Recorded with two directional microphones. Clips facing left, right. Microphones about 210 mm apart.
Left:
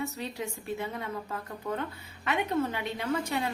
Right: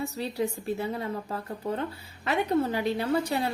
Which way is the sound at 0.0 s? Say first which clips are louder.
Right 5 dB; 35° right (ahead or behind).